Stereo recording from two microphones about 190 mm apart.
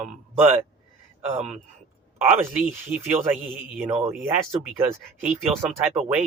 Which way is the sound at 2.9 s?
5° right (ahead or behind).